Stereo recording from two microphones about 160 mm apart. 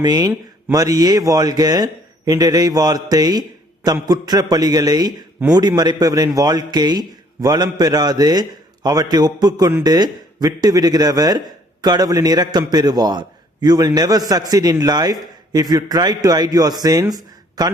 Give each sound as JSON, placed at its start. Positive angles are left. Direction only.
{"t": 0.0, "sound": "a man's voice", "side_deg": -25}